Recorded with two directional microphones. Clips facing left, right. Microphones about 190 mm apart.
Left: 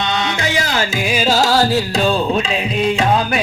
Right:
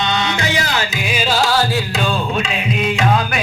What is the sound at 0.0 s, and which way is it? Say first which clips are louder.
Music: even; 50° left (ahead or behind).